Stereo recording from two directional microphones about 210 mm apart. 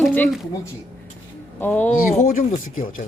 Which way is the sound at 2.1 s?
35° left (ahead or behind).